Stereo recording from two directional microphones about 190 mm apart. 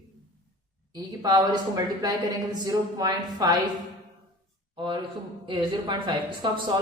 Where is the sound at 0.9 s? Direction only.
20° right (ahead or behind).